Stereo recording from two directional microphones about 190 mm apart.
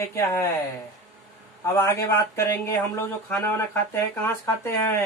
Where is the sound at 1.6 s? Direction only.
15° left (ahead or behind).